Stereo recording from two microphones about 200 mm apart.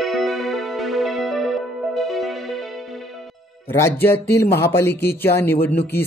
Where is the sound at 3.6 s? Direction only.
10° left (ahead or behind).